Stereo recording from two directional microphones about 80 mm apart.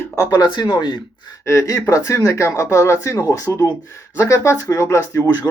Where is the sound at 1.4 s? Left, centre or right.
Left.